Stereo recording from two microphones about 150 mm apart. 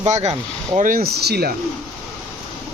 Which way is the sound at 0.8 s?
65° right (ahead or behind).